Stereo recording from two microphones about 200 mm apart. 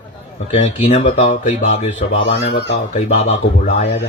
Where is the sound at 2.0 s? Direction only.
65° left (ahead or behind).